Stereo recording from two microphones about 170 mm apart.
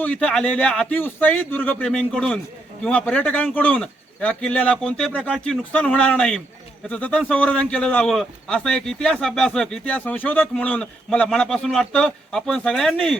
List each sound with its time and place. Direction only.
0.0 s a man's voice: 5° left (ahead or behind)